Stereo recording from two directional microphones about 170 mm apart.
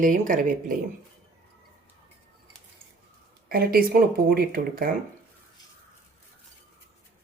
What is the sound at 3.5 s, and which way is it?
Speech, 60° right (ahead or behind).